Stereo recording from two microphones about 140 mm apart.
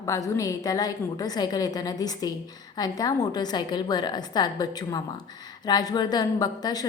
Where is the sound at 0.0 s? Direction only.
25° left (ahead or behind).